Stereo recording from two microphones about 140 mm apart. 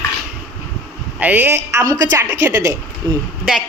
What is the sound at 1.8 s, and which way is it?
Speech, 25° right (ahead or behind).